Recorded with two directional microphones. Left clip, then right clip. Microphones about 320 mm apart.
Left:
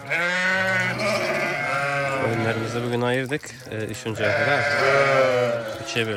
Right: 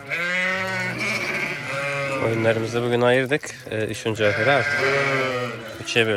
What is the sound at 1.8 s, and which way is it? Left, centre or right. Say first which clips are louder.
Sheep: left 2 dB; left.